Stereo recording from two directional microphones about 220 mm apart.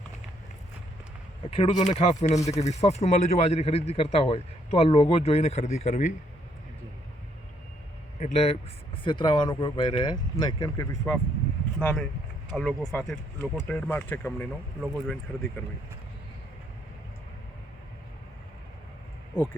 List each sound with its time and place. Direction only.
1.5 s speech: 25° left (ahead or behind)
8.2 s speech: 30° left (ahead or behind); by 15.2 s centre (ahead or behind)